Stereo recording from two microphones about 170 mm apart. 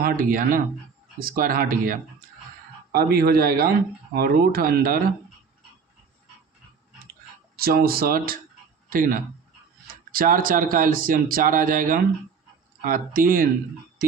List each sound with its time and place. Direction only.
0.0 s speech: 55° right (ahead or behind)
7.5 s speech: 60° right (ahead or behind)